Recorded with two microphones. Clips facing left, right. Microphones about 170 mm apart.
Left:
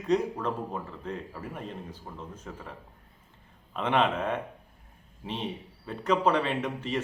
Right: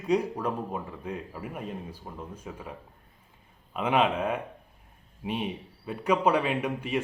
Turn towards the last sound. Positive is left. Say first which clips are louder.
# right 2 dB
turn(degrees=-10)  # may be behind; listen again after turning